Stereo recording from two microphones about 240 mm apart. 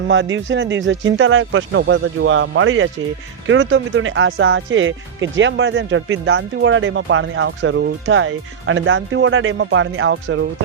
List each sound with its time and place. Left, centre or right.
0.1 s speech: right